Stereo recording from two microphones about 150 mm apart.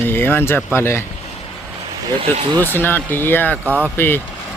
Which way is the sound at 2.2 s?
35° right (ahead or behind).